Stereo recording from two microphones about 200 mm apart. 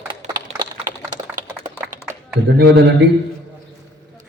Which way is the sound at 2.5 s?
55° right (ahead or behind).